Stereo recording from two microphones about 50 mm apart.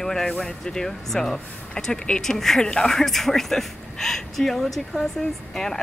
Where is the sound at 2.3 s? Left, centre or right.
Centre.